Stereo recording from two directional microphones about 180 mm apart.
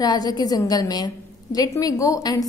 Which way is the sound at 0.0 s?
20° left (ahead or behind).